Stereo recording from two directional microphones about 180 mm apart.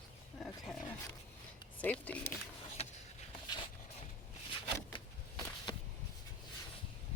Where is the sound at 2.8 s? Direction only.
35° left (ahead or behind).